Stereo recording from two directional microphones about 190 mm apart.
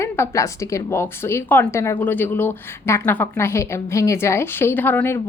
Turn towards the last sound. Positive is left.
turn(degrees=10)  # may be behind; listen again after turning